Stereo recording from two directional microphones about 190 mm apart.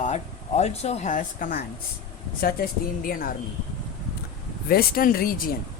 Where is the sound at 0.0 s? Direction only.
35° left (ahead or behind).